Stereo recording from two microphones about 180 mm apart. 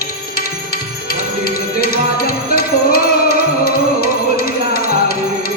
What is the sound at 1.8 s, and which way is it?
Music, 55° left (ahead or behind).